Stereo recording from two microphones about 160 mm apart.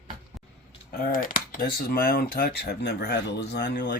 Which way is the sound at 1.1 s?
60° left (ahead or behind).